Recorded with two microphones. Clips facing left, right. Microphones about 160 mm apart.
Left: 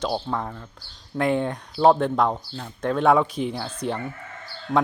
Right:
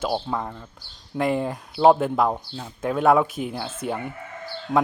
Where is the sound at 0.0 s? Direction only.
5° right (ahead or behind).